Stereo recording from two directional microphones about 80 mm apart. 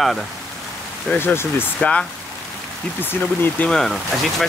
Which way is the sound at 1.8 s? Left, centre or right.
Centre.